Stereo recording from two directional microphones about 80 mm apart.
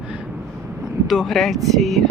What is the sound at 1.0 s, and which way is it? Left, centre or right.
Speech, centre.